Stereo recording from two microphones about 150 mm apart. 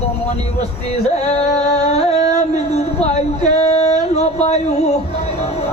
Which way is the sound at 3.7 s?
45° left (ahead or behind).